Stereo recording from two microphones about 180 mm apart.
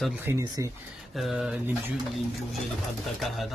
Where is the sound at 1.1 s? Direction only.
Centre (ahead or behind).